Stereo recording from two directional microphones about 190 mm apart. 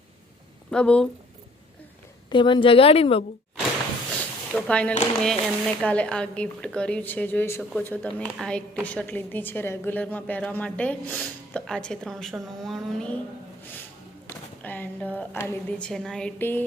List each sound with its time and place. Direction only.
0.7 s speech: 5° left (ahead or behind)
2.3 s a woman's voice: 25° left (ahead or behind)
4.2 s a sound: 5° left (ahead or behind)
5.2 s a woman's voice: 5° left (ahead or behind)
14.3 s a woman's voice: 10° left (ahead or behind)